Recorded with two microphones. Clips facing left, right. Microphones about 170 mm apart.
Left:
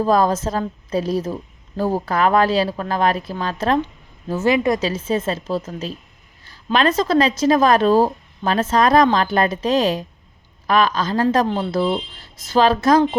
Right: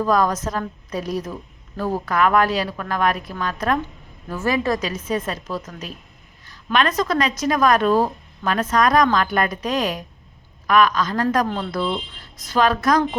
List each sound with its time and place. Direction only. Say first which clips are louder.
0.0 s a woman's voice: left 3 dB; 30° left (ahead or behind)